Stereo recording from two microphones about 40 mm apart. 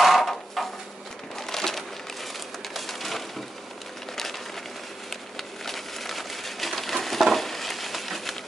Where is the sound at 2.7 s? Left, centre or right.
Centre.